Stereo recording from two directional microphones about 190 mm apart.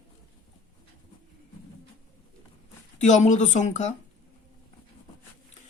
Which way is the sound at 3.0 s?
40° left (ahead or behind).